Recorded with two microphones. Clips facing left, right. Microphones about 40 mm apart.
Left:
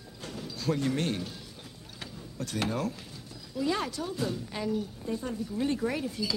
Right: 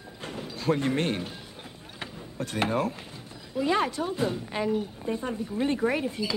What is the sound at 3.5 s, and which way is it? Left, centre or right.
A woman's voice, right.